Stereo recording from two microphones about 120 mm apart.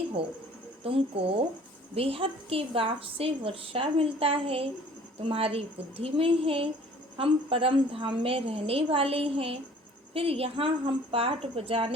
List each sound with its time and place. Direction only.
0.9 s a woman's voice: 50° right (ahead or behind)